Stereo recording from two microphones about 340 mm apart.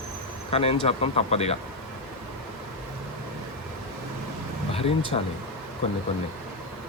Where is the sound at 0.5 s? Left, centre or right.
Centre.